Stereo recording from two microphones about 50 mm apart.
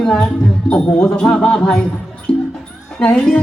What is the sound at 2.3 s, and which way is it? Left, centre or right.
Music, centre.